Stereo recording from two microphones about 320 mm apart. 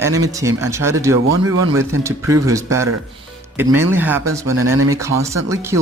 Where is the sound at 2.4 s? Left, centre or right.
Centre.